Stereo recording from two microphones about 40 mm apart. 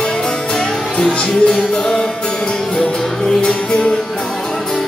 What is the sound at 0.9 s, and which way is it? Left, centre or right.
Music, left.